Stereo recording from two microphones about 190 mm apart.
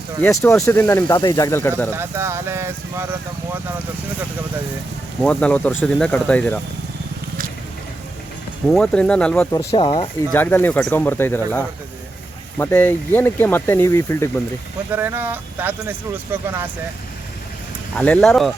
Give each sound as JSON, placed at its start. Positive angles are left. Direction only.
{"t": 0.2, "sound": "speech", "side_deg": 10}
{"t": 1.0, "sound": "speech", "side_deg": 20}
{"t": 1.9, "sound": "speech", "side_deg": -15}
{"t": 5.2, "sound": "speech", "side_deg": 5}
{"t": 8.7, "sound": "speech", "side_deg": 5}
{"t": 9.7, "sound": "speech", "side_deg": 25}
{"t": 10.3, "sound": "speech", "side_deg": 10}
{"t": 14.9, "sound": "speech", "side_deg": -10}
{"t": 17.9, "sound": "speech", "side_deg": 5}